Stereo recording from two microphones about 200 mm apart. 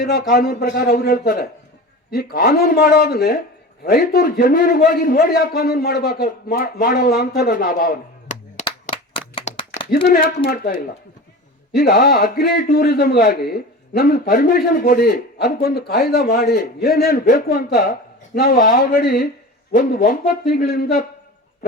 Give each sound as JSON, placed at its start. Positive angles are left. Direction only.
{"t": 0.0, "sound": "a man's voice", "side_deg": 45}
{"t": 9.9, "sound": "a man's voice", "side_deg": 45}